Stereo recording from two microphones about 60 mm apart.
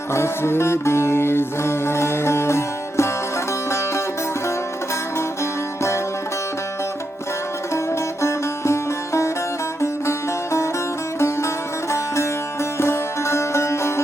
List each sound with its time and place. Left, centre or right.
0.1 s music: left
8.2 s music: left